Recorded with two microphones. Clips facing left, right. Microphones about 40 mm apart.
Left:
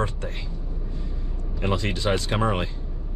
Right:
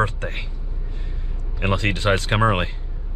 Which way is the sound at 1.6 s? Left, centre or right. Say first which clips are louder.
Right 4 dB; right.